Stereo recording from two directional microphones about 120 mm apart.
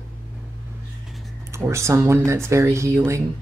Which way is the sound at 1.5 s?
25° right (ahead or behind).